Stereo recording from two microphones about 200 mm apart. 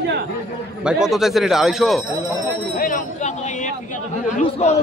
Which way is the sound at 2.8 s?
40° left (ahead or behind).